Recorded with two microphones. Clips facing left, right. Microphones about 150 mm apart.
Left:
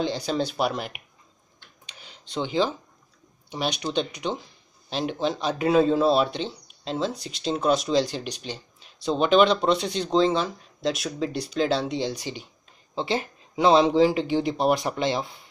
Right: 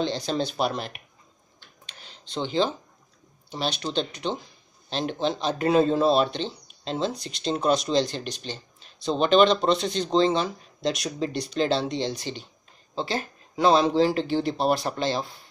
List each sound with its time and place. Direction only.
0.0 s speech: 10° left (ahead or behind)
1.9 s a sound: 10° left (ahead or behind)
3.4 s speech: 15° left (ahead or behind)